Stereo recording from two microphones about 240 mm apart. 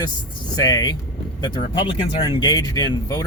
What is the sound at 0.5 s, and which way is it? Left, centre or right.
Speech, centre.